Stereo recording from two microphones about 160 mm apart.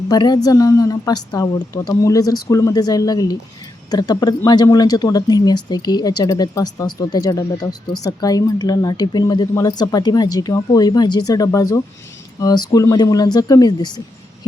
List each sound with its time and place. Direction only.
0.1 s speech: 25° left (ahead or behind)